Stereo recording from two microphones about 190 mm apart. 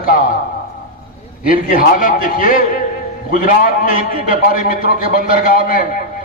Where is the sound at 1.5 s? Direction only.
45° left (ahead or behind).